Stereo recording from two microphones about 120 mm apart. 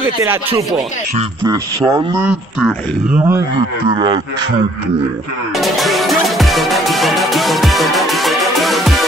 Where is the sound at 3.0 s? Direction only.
15° right (ahead or behind).